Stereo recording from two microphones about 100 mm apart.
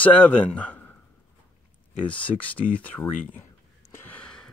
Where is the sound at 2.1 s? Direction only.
15° left (ahead or behind).